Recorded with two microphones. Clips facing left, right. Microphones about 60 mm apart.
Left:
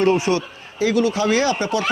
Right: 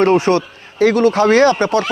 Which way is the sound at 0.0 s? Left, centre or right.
Right.